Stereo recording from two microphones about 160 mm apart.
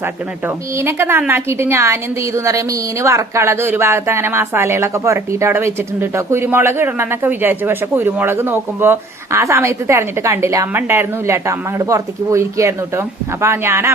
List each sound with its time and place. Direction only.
0.4 s a woman's voice: 15° right (ahead or behind)